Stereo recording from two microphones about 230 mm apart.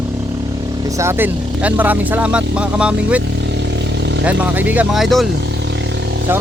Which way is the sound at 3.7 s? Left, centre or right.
Right.